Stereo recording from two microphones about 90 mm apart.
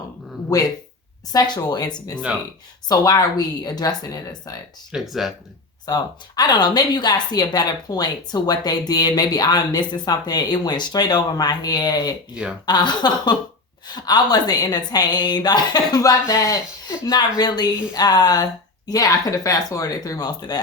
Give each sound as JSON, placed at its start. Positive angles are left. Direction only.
{"t": 1.3, "sound": "a woman's voice", "side_deg": 45}
{"t": 4.9, "sound": "speech", "side_deg": -5}
{"t": 5.8, "sound": "a woman's voice", "side_deg": 50}
{"t": 17.1, "sound": "a woman's voice", "side_deg": 50}